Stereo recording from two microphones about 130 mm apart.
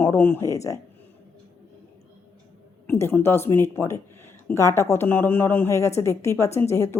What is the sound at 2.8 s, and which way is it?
Speech, 15° left (ahead or behind).